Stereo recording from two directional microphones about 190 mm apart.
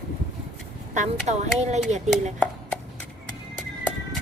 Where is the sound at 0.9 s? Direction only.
40° right (ahead or behind).